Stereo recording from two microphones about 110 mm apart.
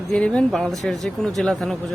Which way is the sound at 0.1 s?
10° left (ahead or behind).